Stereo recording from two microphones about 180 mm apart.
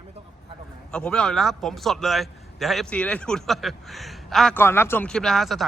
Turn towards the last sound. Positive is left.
turn(degrees=0)  # may be behind; listen again after turning